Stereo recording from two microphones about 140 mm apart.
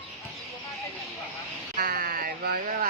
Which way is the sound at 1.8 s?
90° right.